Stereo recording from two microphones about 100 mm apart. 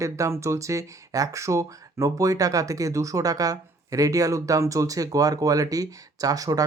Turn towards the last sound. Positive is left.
turn(degrees=-40)  # may be behind; listen again after turning